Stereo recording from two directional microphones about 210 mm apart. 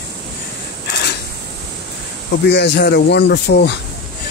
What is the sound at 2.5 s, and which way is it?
Speech, 55° left (ahead or behind).